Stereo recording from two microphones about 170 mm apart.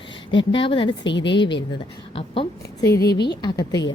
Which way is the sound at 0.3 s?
30° left (ahead or behind).